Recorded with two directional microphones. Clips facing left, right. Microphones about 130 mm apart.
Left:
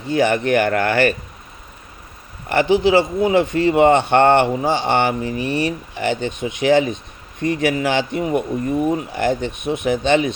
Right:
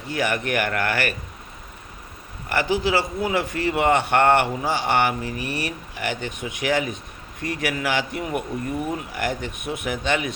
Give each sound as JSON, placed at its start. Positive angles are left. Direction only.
{"t": 0.1, "sound": "speech", "side_deg": 30}
{"t": 2.5, "sound": "speech", "side_deg": 25}